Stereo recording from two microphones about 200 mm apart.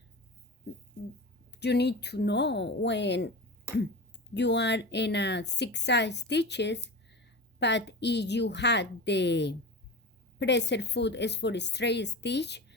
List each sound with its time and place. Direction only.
1.5 s a woman's voice: 55° left (ahead or behind)
4.4 s a woman's voice: 60° left (ahead or behind)